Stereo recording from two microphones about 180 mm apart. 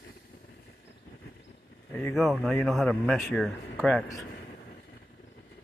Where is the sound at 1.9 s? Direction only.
5° left (ahead or behind).